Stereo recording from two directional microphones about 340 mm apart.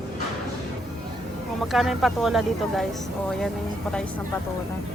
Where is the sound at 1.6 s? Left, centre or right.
Centre.